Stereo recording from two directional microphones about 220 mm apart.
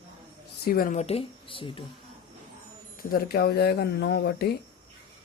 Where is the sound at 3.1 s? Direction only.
45° left (ahead or behind).